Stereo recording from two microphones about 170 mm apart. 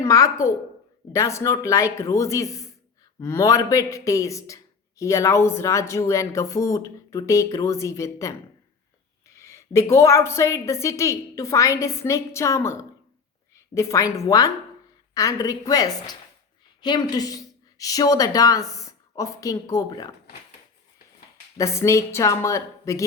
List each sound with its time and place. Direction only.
0.0 s a woman's voice: 20° left (ahead or behind)
9.4 s a man's voice: 15° left (ahead or behind)
21.6 s a man's voice: 15° left (ahead or behind)